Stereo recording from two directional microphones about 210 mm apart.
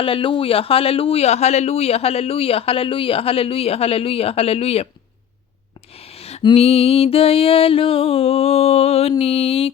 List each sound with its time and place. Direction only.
0.0 s a man's voice: 25° left (ahead or behind)
6.0 s a man's voice: 30° left (ahead or behind)